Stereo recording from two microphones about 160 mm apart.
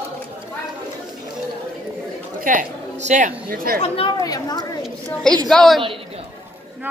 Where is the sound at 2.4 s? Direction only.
55° right (ahead or behind).